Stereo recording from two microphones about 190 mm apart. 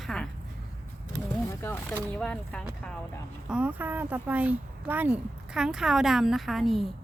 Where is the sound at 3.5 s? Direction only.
10° right (ahead or behind).